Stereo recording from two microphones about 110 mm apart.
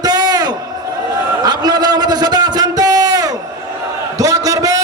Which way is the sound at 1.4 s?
40° right (ahead or behind).